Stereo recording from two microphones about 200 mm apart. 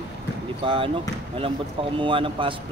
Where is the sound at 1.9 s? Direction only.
25° right (ahead or behind).